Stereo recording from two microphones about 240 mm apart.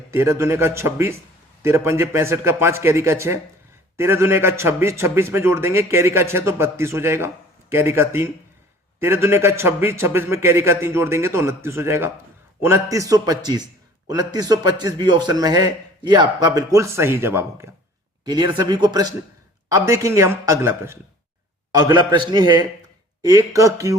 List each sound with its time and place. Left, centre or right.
0.1 s a man's voice: centre